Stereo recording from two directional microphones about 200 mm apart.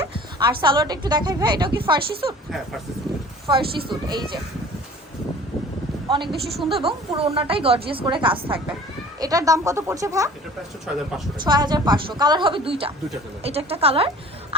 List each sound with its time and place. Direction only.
0.1 s a sound: 25° right (ahead or behind)
0.6 s a woman's voice: 25° right (ahead or behind)
3.4 s a woman's voice: 25° right (ahead or behind)
6.1 s a woman's voice: 25° right (ahead or behind)
10.9 s speech: 5° right (ahead or behind)
11.3 s a woman's voice: 20° right (ahead or behind)